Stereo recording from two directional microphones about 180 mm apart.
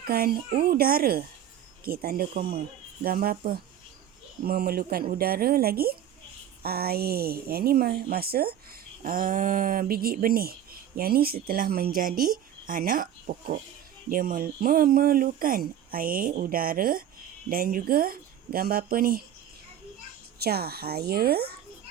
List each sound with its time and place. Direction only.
0.1 s a woman's voice: 55° right (ahead or behind)
20.4 s a woman's voice: 60° right (ahead or behind)